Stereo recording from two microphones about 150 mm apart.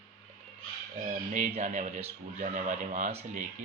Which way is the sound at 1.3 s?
55° right (ahead or behind).